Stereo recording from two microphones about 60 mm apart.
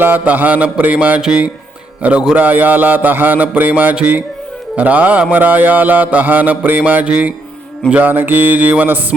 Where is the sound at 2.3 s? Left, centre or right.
Right.